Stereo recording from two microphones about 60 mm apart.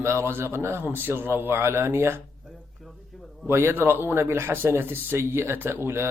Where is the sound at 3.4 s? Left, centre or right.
Right.